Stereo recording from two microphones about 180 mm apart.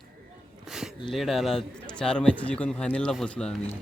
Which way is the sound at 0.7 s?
5° right (ahead or behind).